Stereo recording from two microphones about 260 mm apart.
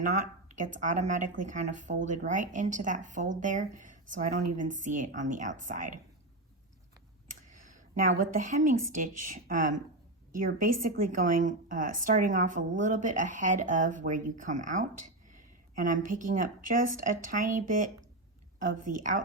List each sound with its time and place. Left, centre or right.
0.0 s a woman's voice: right
7.3 s a sound: right
8.9 s a woman's voice: right